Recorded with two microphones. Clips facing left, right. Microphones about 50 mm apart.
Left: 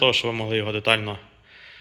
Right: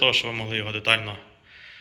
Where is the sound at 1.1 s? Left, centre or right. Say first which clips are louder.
Left 4 dB; centre.